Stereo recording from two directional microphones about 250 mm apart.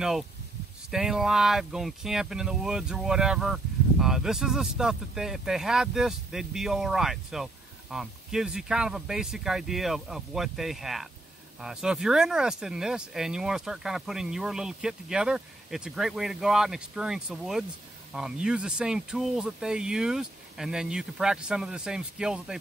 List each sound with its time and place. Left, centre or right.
0.8 s speech: centre